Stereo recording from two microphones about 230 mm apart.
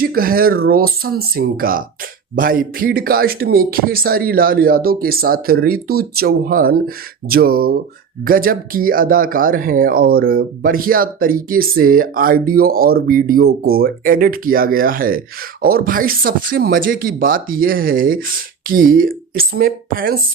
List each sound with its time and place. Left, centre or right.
0.0 s speech: right